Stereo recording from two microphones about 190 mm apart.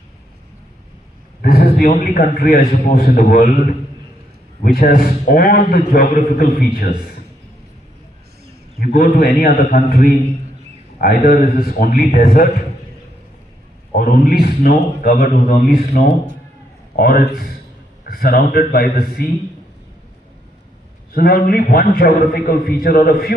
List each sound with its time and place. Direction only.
1.4 s a man's voice: 50° left (ahead or behind)
4.6 s a man's voice: 50° left (ahead or behind)
8.8 s a man's voice: 50° left (ahead or behind)
13.9 s a man's voice: 50° left (ahead or behind)
21.1 s a man's voice: 50° left (ahead or behind)